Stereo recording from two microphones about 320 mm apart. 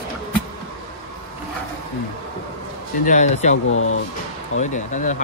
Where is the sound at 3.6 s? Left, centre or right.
Left.